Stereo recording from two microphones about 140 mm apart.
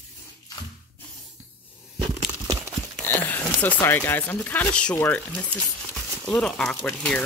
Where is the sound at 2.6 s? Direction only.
20° right (ahead or behind).